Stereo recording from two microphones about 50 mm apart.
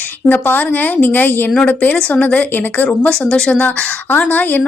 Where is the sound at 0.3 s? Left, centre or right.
Left.